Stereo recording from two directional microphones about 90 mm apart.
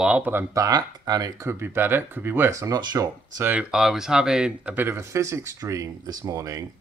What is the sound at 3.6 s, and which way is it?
Speech, 5° right (ahead or behind).